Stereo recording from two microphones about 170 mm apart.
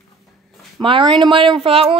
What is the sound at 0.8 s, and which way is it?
Speech, 30° right (ahead or behind).